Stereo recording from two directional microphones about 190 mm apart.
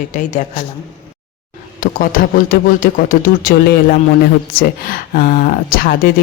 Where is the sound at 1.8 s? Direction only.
45° left (ahead or behind).